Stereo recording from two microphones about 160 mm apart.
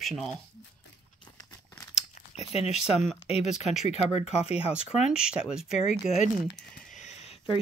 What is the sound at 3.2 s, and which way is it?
Speech, 40° left (ahead or behind).